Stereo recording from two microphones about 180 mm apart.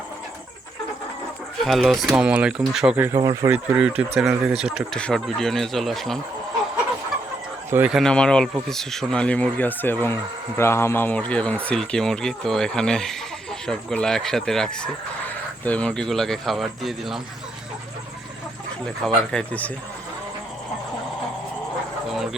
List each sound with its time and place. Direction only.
1.6 s speech: centre (ahead or behind)
7.7 s speech: 5° right (ahead or behind)
19.0 s speech: 5° left (ahead or behind)
22.1 s a sound: centre (ahead or behind)